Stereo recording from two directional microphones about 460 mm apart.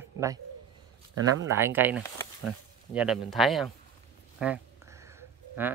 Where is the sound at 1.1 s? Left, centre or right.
Right.